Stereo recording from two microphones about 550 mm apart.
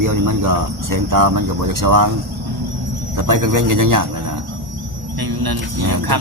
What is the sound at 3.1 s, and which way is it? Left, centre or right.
Speech, right.